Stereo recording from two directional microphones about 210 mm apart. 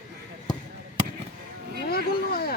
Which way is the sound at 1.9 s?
45° left (ahead or behind).